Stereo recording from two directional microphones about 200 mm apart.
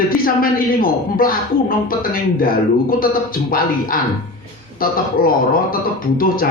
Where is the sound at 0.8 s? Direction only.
45° left (ahead or behind).